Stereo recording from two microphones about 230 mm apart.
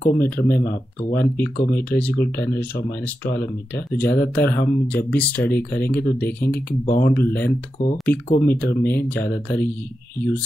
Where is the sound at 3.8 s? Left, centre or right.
Centre.